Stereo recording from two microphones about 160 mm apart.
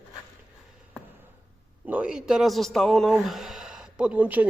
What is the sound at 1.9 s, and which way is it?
A man's voice, 5° right (ahead or behind).